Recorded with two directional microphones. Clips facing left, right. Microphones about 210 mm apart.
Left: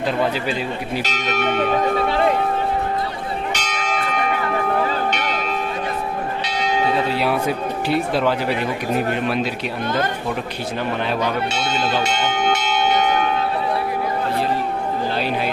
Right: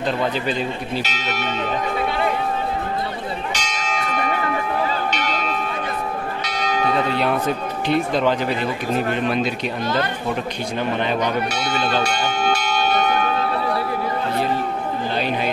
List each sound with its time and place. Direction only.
1.0 s speech: 55° left (ahead or behind)
3.5 s church bell: 60° left (ahead or behind)
6.4 s church bell: 25° left (ahead or behind)
7.1 s speech: 5° left (ahead or behind)
12.0 s church bell: 20° left (ahead or behind)